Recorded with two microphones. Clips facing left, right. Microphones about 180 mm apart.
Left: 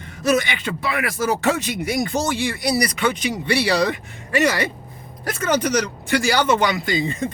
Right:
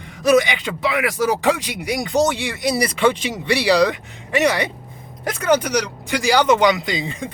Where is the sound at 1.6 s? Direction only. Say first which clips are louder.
Left 2 dB; 10° right (ahead or behind).